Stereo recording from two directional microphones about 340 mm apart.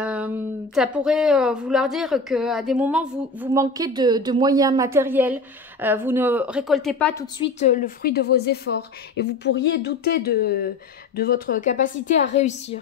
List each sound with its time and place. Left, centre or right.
0.0 s a sound: centre
0.7 s a woman's voice: centre
7.5 s a woman's voice: left